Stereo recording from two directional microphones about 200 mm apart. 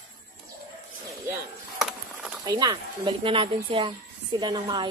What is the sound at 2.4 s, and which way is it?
Speech, 20° right (ahead or behind).